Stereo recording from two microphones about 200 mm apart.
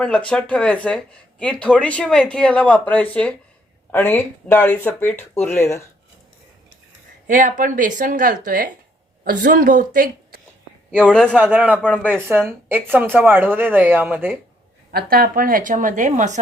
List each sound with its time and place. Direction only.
0.0 s speech: 5° left (ahead or behind)
7.3 s a woman's voice: 40° right (ahead or behind)
10.9 s speech: 5° left (ahead or behind)
11.3 s a woman's voice: 10° right (ahead or behind)
14.9 s a woman's voice: 50° right (ahead or behind)